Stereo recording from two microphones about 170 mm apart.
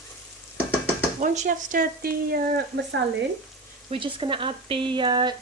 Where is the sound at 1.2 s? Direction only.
45° right (ahead or behind).